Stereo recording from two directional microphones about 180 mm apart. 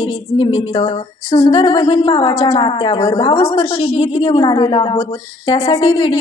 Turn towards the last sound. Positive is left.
turn(degrees=30)  # may be behind; listen again after turning